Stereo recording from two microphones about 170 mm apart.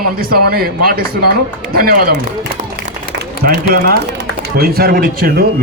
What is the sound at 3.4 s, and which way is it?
A man's voice, 65° right (ahead or behind).